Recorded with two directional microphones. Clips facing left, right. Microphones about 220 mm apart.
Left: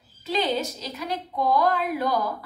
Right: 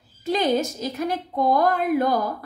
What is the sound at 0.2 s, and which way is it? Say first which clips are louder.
A woman's voice: right 4 dB; 50° right (ahead or behind).